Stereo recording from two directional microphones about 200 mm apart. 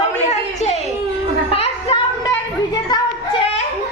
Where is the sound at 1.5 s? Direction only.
30° left (ahead or behind).